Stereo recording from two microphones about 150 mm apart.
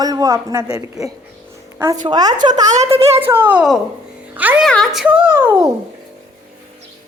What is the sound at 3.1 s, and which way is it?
A woman's voice, 15° right (ahead or behind).